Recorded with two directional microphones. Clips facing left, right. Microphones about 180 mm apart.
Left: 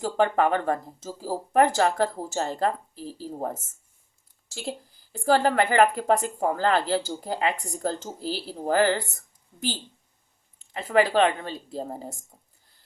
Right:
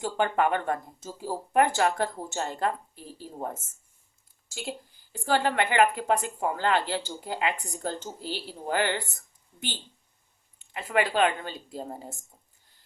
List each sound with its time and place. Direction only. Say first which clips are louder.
0.0 s speech: left 3 dB; 35° left (ahead or behind)
5.2 s speech: left 4 dB; 40° left (ahead or behind)
10.6 s speech: left 5 dB; 35° left (ahead or behind)